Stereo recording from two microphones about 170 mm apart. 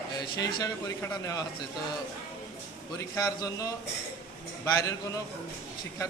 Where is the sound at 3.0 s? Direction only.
20° left (ahead or behind).